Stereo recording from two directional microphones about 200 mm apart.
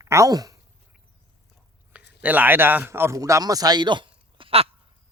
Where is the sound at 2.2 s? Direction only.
10° right (ahead or behind); by 4.7 s 25° right (ahead or behind).